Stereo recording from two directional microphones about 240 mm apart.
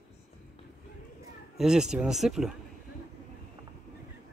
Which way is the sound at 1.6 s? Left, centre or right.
Centre.